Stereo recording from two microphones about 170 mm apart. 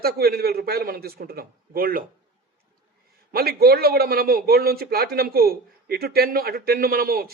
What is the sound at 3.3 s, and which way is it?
A man's voice, 65° right (ahead or behind).